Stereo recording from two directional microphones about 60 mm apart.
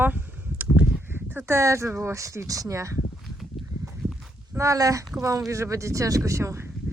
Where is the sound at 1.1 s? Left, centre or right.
Right.